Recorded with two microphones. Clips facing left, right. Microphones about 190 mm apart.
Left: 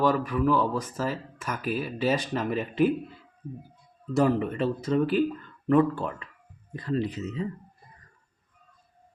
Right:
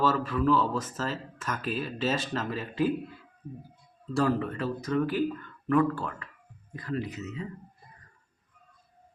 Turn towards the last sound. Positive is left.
turn(degrees=35)  # may be behind; listen again after turning